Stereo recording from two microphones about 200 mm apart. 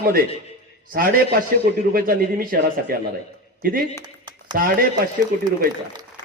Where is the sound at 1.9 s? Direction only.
45° right (ahead or behind).